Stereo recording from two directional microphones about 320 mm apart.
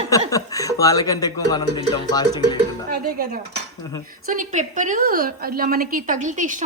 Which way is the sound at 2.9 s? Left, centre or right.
Right.